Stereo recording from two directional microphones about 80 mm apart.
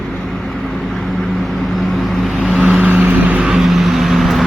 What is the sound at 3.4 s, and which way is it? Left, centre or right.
Vehicle, centre.